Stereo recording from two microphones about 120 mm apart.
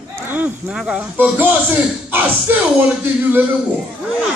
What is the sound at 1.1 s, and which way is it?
Speech, 15° right (ahead or behind).